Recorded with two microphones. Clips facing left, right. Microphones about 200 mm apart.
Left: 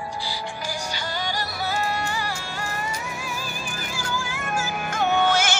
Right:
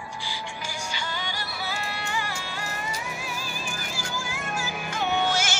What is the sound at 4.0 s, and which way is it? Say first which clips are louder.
Music: left 6 dB; 50° left (ahead or behind).